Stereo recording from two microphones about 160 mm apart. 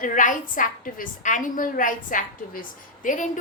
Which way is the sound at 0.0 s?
55° left (ahead or behind).